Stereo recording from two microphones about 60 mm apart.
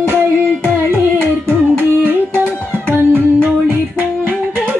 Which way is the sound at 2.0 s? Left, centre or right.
Right.